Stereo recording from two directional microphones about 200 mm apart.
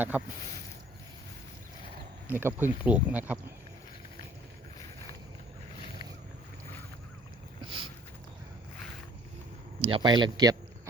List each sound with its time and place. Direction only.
2.2 s speech: 10° right (ahead or behind)
7.6 s a sound: 25° right (ahead or behind)
9.8 s speech: 25° right (ahead or behind)